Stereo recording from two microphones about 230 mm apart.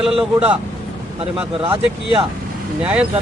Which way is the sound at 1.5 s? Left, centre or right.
Right.